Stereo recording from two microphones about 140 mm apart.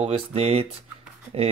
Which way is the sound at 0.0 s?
45° right (ahead or behind).